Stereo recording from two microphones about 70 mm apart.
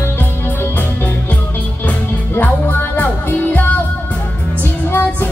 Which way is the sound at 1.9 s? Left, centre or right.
Left.